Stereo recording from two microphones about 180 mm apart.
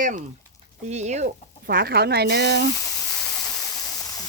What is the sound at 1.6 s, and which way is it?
Speech, 60° right (ahead or behind).